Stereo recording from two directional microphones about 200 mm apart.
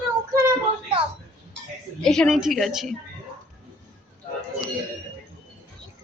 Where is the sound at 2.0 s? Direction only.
Centre (ahead or behind).